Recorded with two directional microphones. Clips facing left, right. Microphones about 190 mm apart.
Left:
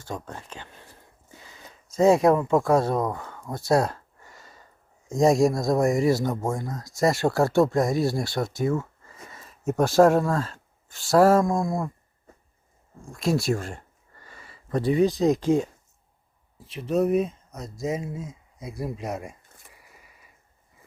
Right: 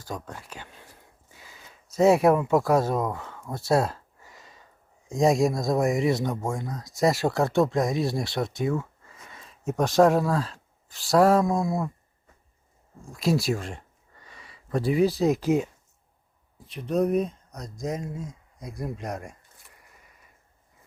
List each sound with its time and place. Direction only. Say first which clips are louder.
0.1 s speech: left 1 dB; 25° left (ahead or behind)
1.9 s speech: left 1 dB; 5° right (ahead or behind)
3.2 s a sound: left 1 dB; centre (ahead or behind)
5.0 s speech: left 2 dB; centre (ahead or behind)
13.1 s speech: left 1 dB; centre (ahead or behind)